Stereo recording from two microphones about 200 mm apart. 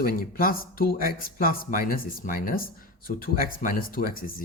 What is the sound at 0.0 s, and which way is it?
Speech, 45° left (ahead or behind).